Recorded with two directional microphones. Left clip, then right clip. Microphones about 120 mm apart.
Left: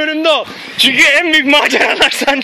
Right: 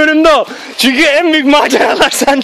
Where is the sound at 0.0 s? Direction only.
80° right.